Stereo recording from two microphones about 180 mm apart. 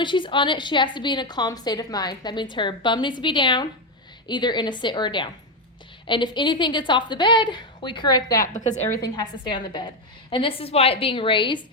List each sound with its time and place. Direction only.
0.0 s a woman's voice: 25° left (ahead or behind)
8.4 s a woman's voice: 40° left (ahead or behind)
9.0 s a woman's voice: 25° left (ahead or behind)